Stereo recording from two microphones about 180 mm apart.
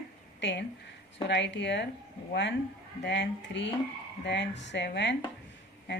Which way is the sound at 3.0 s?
75° left (ahead or behind).